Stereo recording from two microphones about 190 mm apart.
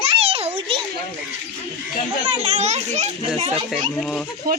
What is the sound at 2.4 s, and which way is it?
A child's voice, 35° right (ahead or behind).